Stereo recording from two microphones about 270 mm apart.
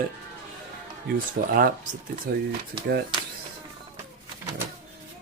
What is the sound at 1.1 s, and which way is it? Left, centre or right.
Speech, right.